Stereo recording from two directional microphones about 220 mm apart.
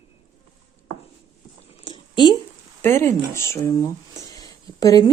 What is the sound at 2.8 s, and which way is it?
Speech, 10° left (ahead or behind).